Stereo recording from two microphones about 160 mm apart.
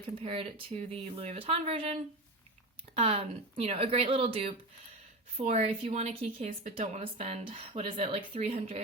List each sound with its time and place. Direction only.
0.2 s a woman's voice: 40° right (ahead or behind)